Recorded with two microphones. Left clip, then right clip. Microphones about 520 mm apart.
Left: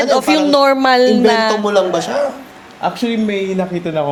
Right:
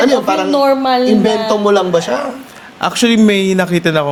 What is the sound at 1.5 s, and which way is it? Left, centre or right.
Music, centre.